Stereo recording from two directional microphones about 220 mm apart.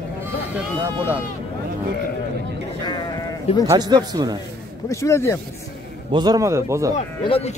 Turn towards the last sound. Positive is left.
turn(degrees=25)  # may be behind; listen again after turning